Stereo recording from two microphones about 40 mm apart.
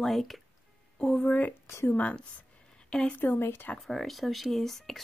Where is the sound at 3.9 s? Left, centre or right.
Centre.